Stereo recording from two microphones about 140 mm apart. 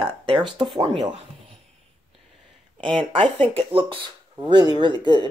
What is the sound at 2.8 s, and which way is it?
Speech, 35° right (ahead or behind).